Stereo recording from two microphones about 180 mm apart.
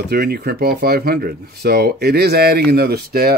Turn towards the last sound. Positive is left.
turn(degrees=-60)  # may be behind; listen again after turning